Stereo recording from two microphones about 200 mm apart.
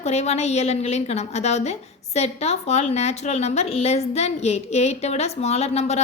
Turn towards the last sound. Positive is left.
turn(degrees=30)  # may be behind; listen again after turning